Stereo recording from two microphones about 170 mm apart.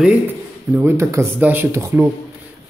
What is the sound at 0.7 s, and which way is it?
Speech, 15° right (ahead or behind).